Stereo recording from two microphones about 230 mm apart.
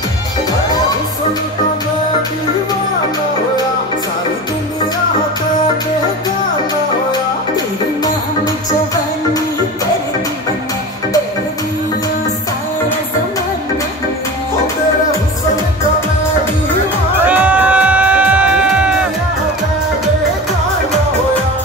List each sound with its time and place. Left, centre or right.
7.1 s music: centre
17.3 s music: centre